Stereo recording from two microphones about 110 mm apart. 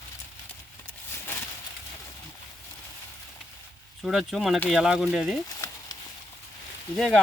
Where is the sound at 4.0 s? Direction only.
Centre (ahead or behind).